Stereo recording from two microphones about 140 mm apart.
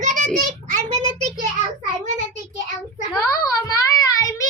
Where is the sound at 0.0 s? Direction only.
70° right (ahead or behind).